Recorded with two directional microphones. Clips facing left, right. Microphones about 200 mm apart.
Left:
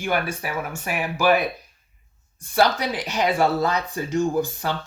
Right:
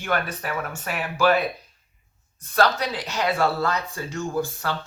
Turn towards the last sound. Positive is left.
turn(degrees=15)  # may be behind; listen again after turning